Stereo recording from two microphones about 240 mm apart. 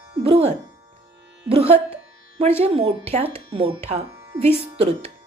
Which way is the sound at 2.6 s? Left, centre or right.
Right.